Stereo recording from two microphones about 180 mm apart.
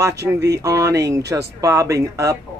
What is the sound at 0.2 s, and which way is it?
Speech, 15° right (ahead or behind).